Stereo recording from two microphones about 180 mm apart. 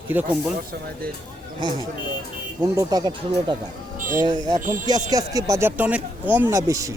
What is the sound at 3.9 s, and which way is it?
Speech, 45° right (ahead or behind).